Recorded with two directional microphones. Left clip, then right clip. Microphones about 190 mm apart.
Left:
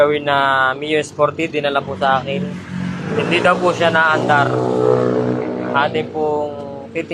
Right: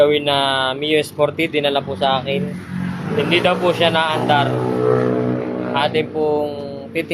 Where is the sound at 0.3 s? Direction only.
15° right (ahead or behind).